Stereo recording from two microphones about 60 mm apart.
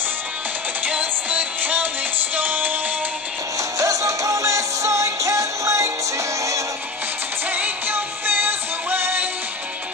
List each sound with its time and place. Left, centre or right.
0.8 s music: right
3.7 s music: right
7.5 s music: right